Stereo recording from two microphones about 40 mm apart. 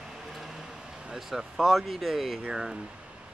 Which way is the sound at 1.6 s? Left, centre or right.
Centre.